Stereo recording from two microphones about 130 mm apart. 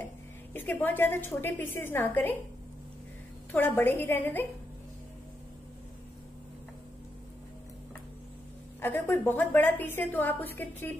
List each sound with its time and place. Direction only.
0.5 s a woman's voice: 15° left (ahead or behind)
3.5 s a woman's voice: 15° left (ahead or behind)
8.8 s a woman's voice: 15° left (ahead or behind)